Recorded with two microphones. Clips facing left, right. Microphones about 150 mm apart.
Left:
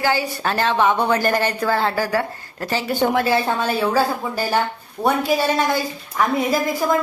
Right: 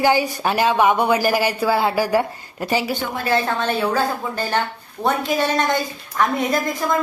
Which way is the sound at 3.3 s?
10° left (ahead or behind).